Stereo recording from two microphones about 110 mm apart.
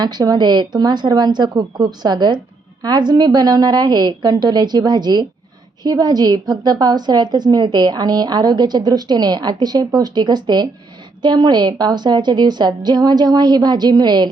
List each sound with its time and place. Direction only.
0.0 s a woman's voice: 40° right (ahead or behind)